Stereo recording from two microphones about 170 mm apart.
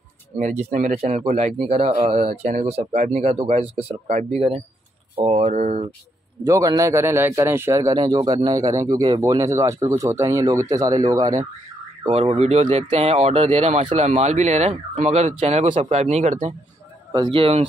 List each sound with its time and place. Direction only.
0.4 s speech: 45° right (ahead or behind)
6.4 s a man's voice: 20° right (ahead or behind)
12.1 s speech: 40° right (ahead or behind)
17.1 s speech: 30° right (ahead or behind)